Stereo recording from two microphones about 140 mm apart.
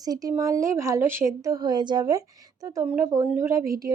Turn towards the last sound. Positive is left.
turn(degrees=-25)  # may be behind; listen again after turning